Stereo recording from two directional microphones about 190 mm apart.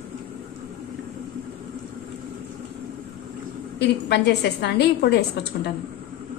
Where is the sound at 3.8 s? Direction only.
60° left (ahead or behind).